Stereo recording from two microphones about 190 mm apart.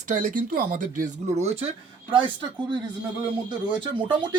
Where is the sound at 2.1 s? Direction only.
25° right (ahead or behind).